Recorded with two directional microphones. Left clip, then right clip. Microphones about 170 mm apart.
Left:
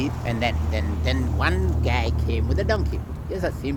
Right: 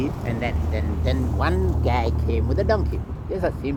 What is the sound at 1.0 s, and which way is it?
Speech, 10° left (ahead or behind).